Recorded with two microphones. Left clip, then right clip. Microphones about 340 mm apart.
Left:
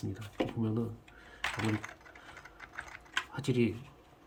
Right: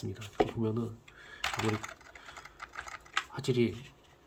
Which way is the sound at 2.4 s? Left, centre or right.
Centre.